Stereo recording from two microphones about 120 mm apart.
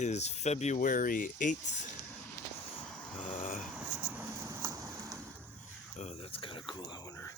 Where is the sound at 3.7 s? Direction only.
15° right (ahead or behind).